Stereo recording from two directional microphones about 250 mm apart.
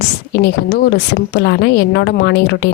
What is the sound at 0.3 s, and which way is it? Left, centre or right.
A woman's voice, left.